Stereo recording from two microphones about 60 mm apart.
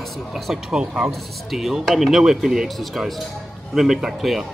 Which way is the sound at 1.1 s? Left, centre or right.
Centre.